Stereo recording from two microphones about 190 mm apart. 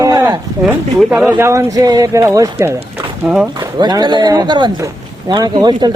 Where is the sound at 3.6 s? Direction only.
20° right (ahead or behind).